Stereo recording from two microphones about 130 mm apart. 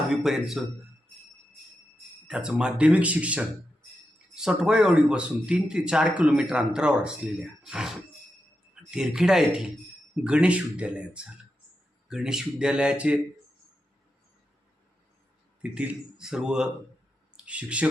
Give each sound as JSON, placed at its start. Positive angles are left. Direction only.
{"t": 0.1, "sound": "speech", "side_deg": 0}
{"t": 2.2, "sound": "speech", "side_deg": -5}
{"t": 15.6, "sound": "speech", "side_deg": -10}